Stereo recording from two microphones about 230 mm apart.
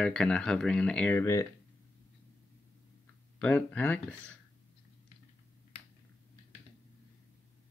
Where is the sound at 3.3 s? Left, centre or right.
Centre.